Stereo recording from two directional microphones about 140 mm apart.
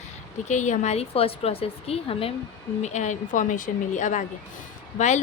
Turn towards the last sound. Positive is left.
turn(degrees=55)  # may be behind; listen again after turning